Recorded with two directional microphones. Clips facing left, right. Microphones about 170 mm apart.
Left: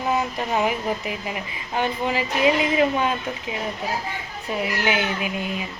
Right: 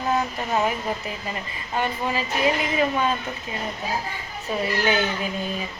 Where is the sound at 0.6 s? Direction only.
10° left (ahead or behind).